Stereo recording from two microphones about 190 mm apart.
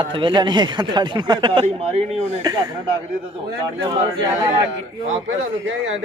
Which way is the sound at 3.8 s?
20° right (ahead or behind).